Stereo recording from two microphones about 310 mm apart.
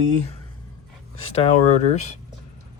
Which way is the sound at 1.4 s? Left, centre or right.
Left.